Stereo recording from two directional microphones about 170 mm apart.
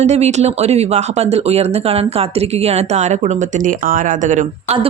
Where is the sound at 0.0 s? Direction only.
40° right (ahead or behind).